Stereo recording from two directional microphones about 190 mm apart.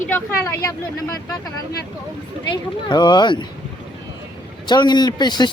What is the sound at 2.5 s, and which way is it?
Speech, 20° left (ahead or behind).